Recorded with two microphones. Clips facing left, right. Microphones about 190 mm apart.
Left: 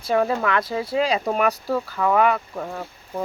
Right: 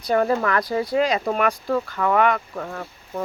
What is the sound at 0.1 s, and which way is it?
Speech, 5° left (ahead or behind).